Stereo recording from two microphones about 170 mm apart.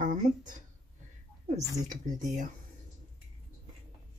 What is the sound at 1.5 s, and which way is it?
Speech, 45° right (ahead or behind).